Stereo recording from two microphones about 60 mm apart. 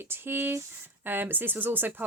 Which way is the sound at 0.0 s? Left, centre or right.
Right.